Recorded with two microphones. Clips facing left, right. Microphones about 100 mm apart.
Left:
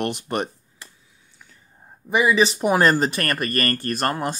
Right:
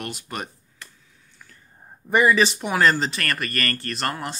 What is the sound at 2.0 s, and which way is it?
Speech, 5° left (ahead or behind).